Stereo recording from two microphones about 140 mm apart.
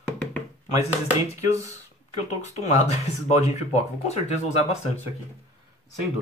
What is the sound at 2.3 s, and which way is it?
Speech, 55° left (ahead or behind).